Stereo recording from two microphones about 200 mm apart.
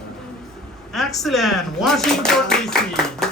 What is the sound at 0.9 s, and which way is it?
Speech, centre (ahead or behind).